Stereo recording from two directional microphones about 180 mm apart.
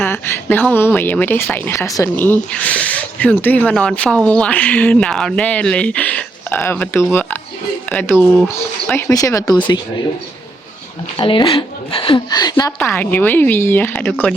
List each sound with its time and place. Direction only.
0.0 s a woman's voice: 10° left (ahead or behind)
11.2 s a woman's voice: 30° left (ahead or behind); by 14.3 s 5° left (ahead or behind)